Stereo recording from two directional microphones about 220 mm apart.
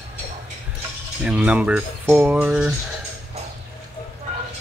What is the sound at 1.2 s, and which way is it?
Speech, 5° right (ahead or behind).